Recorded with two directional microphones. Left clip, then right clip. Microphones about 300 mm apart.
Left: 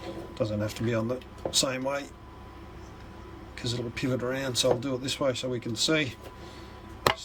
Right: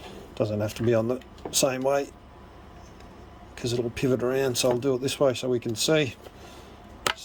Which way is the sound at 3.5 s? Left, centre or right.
Right.